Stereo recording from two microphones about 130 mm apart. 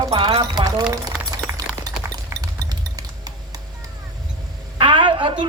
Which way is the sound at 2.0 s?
25° right (ahead or behind).